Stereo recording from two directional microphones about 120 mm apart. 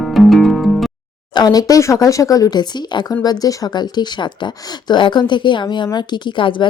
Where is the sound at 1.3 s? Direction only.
35° left (ahead or behind).